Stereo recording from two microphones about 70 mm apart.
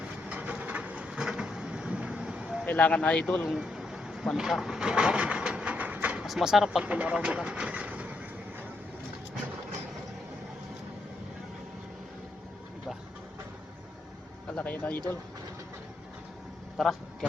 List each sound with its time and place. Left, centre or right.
0.3 s a sound: centre
2.6 s speech: left
3.6 s a sound: centre
4.4 s train: centre
6.2 s speech: centre
6.8 s vehicle: centre
14.5 s speech: left
16.7 s vehicle: centre